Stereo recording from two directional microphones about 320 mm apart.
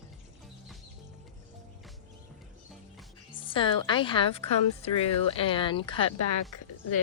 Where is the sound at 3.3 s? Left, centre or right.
Centre.